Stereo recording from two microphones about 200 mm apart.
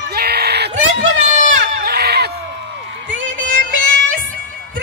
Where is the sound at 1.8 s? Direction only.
50° right (ahead or behind).